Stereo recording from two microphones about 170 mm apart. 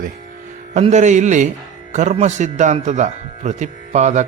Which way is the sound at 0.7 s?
45° right (ahead or behind).